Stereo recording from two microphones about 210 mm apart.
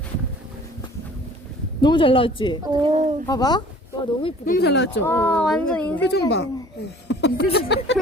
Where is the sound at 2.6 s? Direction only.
25° right (ahead or behind).